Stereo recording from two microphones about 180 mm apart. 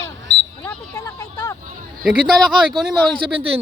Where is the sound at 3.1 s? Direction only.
25° right (ahead or behind).